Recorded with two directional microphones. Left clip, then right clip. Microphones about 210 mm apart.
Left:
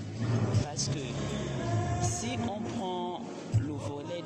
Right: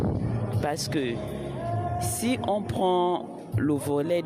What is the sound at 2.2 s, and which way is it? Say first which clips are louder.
Speech: right 8 dB; 55° right (ahead or behind).